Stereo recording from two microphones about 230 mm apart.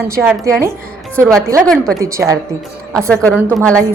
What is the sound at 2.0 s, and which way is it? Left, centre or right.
Speech, centre.